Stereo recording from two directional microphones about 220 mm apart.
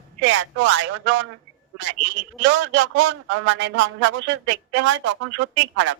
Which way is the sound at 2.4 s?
60° right (ahead or behind).